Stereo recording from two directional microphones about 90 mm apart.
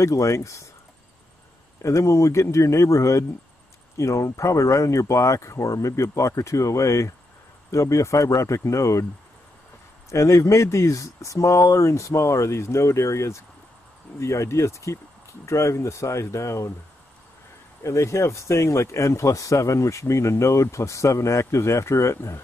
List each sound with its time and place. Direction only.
0.0 s speech: 35° left (ahead or behind)
1.8 s speech: 35° left (ahead or behind)
10.1 s speech: 35° left (ahead or behind)
17.8 s speech: 35° left (ahead or behind)